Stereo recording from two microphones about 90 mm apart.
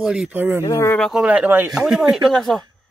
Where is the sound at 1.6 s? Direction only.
5° right (ahead or behind).